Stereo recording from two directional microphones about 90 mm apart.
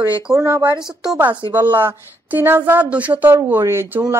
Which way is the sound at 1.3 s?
60° right (ahead or behind).